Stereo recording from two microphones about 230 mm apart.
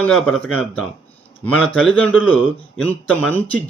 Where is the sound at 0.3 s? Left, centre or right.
Centre.